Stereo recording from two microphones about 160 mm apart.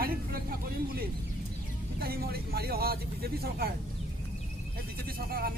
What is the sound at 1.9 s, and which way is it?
A man's voice, 70° right (ahead or behind).